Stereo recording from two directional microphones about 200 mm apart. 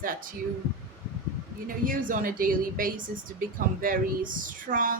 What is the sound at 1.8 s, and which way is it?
Speech, 45° right (ahead or behind).